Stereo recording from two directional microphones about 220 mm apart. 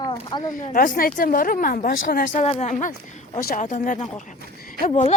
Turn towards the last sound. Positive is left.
turn(degrees=30)  # may be behind; listen again after turning